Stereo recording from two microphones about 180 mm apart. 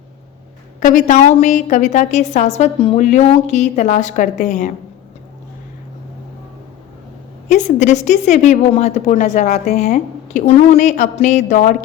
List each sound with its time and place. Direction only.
0.8 s a woman's voice: 45° left (ahead or behind)
7.4 s a woman's voice: 40° left (ahead or behind)